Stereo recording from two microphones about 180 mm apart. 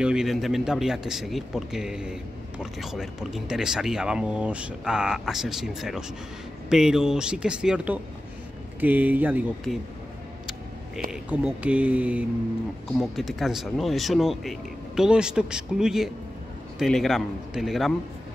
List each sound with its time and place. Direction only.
0.0 s speech: 5° right (ahead or behind)
11.1 s speech: 5° right (ahead or behind)